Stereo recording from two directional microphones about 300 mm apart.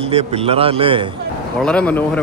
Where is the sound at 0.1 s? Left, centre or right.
Centre.